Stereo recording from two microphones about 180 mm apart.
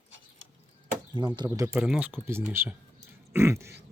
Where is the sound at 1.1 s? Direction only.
25° right (ahead or behind).